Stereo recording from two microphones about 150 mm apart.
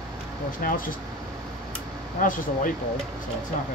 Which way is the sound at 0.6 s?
65° left (ahead or behind).